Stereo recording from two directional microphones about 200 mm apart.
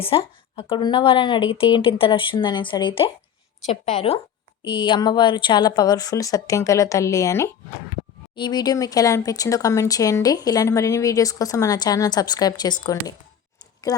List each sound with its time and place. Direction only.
0.0 s speech: 30° left (ahead or behind)